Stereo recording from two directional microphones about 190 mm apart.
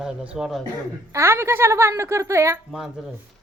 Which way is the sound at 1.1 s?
15° right (ahead or behind).